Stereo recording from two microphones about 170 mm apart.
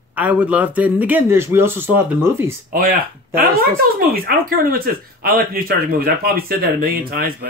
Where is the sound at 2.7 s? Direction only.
55° right (ahead or behind).